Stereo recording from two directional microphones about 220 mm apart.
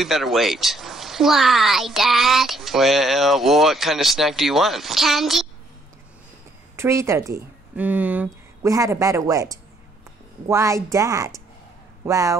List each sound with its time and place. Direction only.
0.0 s speech: centre (ahead or behind)
6.8 s a woman's voice: 10° right (ahead or behind)